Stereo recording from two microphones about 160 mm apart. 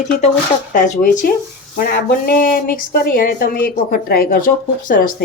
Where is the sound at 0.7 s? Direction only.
55° left (ahead or behind).